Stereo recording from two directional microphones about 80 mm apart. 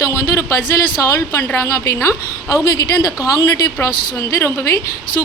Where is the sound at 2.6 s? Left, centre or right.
Left.